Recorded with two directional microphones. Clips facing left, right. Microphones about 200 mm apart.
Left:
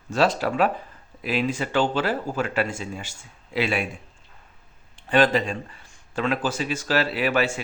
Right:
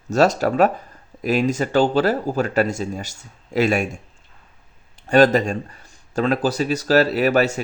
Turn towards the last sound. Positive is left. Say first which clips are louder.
# right 5 dB
turn(degrees=-40)  # may be behind; listen again after turning